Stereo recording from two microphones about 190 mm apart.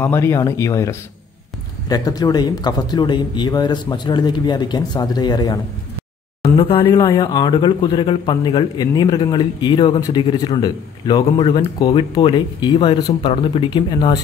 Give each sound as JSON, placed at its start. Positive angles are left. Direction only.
{"t": 0.0, "sound": "a man's voice", "side_deg": 10}